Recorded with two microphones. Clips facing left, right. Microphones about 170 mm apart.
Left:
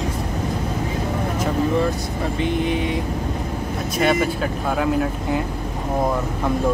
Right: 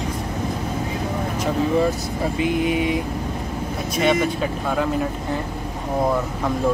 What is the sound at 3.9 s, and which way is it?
Speech, centre (ahead or behind).